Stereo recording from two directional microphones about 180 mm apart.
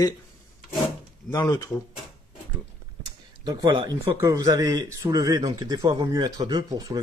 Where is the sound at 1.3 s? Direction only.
15° left (ahead or behind).